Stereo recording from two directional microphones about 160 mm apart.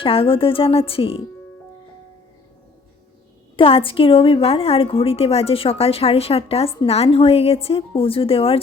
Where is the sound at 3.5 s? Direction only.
35° left (ahead or behind).